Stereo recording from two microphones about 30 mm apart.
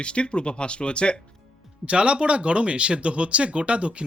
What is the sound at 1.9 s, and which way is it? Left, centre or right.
Speech, right.